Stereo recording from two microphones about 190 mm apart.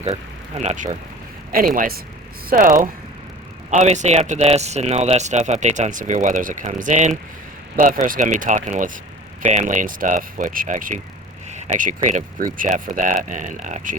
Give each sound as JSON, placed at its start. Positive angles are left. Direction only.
{"t": 0.0, "sound": "speech", "side_deg": -35}